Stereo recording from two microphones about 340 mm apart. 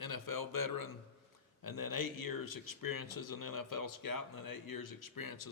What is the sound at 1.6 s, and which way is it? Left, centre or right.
Speech, left.